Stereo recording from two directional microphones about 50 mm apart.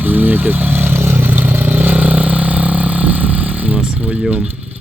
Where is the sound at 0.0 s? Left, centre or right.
Right.